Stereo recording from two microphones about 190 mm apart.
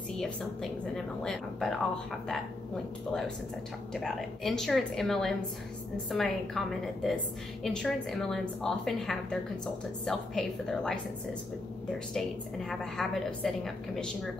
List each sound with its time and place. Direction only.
0.2 s a woman's voice: 5° left (ahead or behind)
3.9 s a woman's voice: centre (ahead or behind)
12.1 s a woman's voice: centre (ahead or behind)